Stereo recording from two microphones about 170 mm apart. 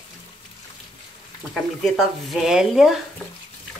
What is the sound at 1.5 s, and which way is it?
Speech, centre (ahead or behind).